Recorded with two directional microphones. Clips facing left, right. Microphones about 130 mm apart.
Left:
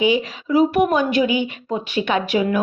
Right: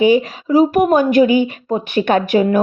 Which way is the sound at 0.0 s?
45° right (ahead or behind).